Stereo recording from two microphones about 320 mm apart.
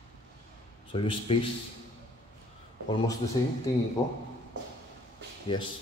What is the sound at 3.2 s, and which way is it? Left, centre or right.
Speech, left.